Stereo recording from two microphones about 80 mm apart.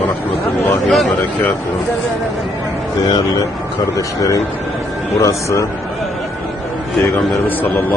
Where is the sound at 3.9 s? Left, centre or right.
Left.